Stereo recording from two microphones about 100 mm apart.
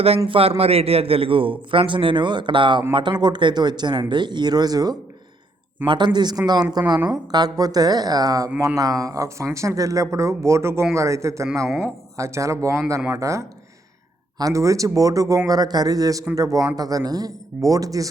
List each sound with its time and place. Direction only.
0.3 s a man's voice: 75° right (ahead or behind); by 4.9 s 40° right (ahead or behind)
5.8 s speech: 50° right (ahead or behind); by 18.1 s 35° right (ahead or behind)